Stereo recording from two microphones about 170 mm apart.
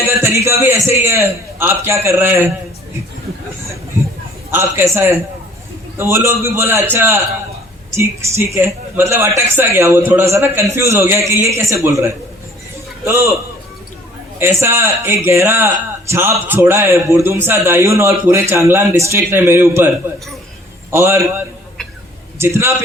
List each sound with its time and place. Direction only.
0.2 s a man's voice: 15° right (ahead or behind)
4.5 s a man's voice: 15° right (ahead or behind)
14.6 s a man's voice: 15° right (ahead or behind)
20.9 s a man's voice: 15° right (ahead or behind)